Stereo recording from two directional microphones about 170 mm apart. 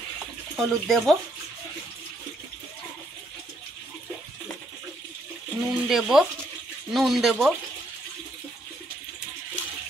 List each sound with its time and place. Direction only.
0.6 s speech: centre (ahead or behind)
5.7 s speech: 5° right (ahead or behind)